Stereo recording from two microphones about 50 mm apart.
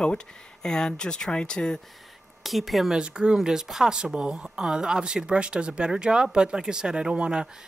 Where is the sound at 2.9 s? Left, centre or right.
Centre.